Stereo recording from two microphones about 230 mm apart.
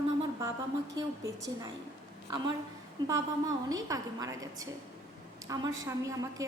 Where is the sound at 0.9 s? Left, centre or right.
Centre.